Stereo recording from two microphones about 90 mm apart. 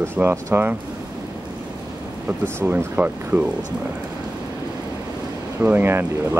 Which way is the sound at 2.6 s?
20° right (ahead or behind).